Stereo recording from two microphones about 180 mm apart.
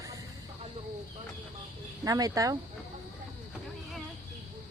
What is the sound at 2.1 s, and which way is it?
Speech, 20° right (ahead or behind).